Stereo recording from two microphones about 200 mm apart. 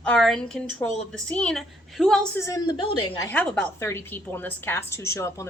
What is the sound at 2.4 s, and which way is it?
Speech, 20° left (ahead or behind).